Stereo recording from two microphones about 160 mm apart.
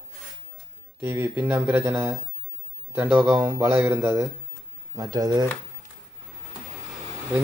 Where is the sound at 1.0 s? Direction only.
15° right (ahead or behind).